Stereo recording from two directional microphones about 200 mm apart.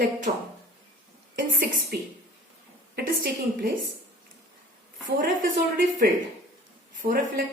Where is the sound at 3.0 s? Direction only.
45° right (ahead or behind).